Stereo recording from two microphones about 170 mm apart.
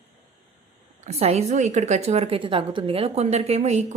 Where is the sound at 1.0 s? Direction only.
40° right (ahead or behind).